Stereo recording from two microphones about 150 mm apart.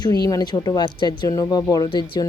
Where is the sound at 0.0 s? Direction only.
25° left (ahead or behind).